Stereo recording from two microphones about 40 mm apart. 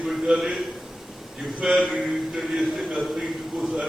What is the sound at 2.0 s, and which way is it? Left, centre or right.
A man's voice, centre.